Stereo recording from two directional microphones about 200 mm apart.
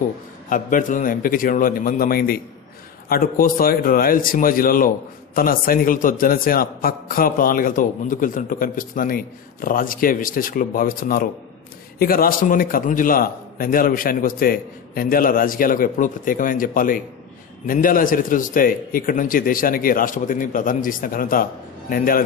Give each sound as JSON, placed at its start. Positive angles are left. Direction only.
{"t": 0.5, "sound": "speech", "side_deg": 40}